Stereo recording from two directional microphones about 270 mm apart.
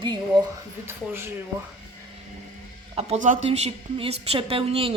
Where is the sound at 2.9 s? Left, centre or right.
Right.